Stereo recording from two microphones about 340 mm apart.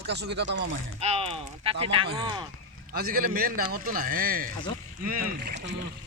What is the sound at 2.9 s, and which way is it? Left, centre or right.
Speech, right.